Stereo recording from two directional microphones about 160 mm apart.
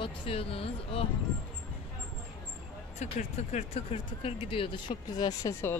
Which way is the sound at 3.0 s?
45° left (ahead or behind).